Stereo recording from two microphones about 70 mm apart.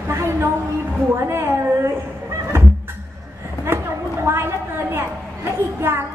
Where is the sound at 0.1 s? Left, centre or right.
Right.